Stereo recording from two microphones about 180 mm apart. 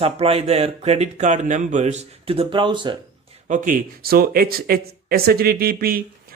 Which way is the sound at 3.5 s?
45° right (ahead or behind).